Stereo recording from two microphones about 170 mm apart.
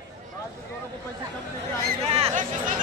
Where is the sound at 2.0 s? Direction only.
35° right (ahead or behind).